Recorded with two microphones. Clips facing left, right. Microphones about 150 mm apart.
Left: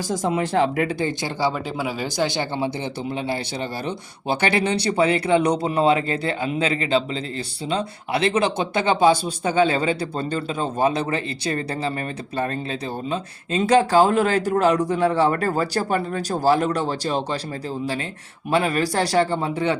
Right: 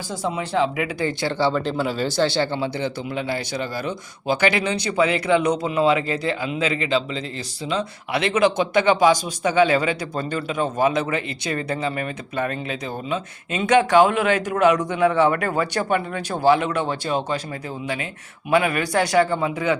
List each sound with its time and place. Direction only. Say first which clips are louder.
0.1 s speech: left 2 dB; 50° left (ahead or behind)
0.9 s speech: right 1 dB; 20° left (ahead or behind)
18.5 s speech: right 1 dB; 30° left (ahead or behind)